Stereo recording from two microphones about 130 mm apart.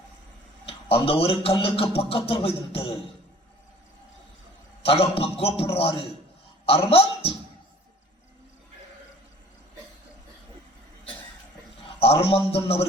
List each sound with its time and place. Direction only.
0.6 s a man's voice: 45° left (ahead or behind)
4.8 s a man's voice: 45° left (ahead or behind)
11.8 s a sound: 50° left (ahead or behind)
12.2 s a man's voice: 50° left (ahead or behind)